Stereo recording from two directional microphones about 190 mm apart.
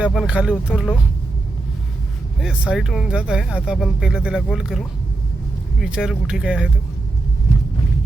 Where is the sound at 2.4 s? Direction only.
5° right (ahead or behind).